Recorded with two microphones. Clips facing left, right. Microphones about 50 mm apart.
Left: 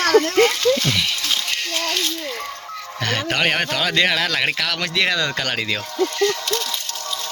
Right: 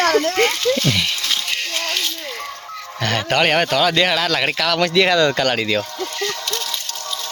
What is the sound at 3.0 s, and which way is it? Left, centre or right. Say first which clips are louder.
Speech: right 3 dB; centre.